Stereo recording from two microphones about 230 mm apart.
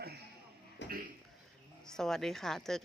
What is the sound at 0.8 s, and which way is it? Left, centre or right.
Cough, left.